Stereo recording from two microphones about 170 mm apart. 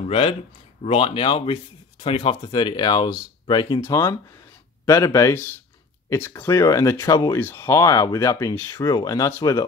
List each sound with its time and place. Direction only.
0.1 s speech: 35° left (ahead or behind)